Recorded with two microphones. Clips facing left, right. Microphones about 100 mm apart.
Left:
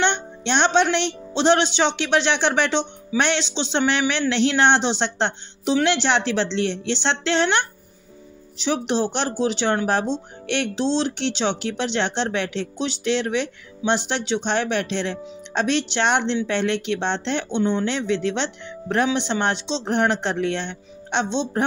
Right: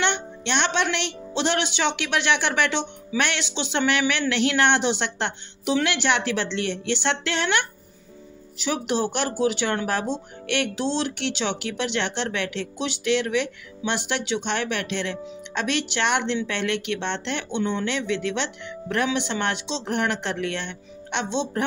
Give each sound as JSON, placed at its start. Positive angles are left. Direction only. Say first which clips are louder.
{"t": 0.0, "sound": "speech", "louder": "left 3 dB", "side_deg": 30}